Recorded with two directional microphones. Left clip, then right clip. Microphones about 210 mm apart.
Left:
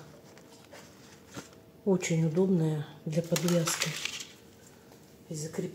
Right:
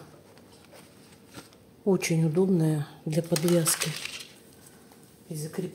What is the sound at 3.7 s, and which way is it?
Speech, centre (ahead or behind).